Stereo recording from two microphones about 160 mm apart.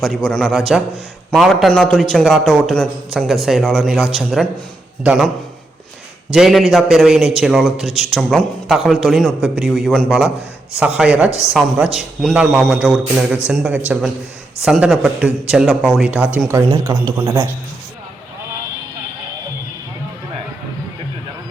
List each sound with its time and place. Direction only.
0.3 s a man's voice: 5° left (ahead or behind)
6.3 s a man's voice: 5° right (ahead or behind)
10.8 s a man's voice: 5° right (ahead or behind)